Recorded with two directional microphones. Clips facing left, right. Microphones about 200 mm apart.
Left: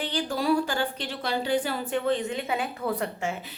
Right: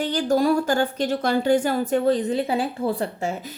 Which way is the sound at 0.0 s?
45° right (ahead or behind).